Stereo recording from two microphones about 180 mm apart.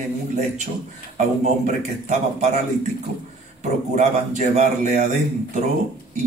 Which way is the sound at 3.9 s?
40° right (ahead or behind).